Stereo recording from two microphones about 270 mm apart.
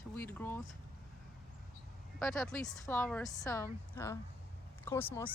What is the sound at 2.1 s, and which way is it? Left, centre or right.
Speech, centre.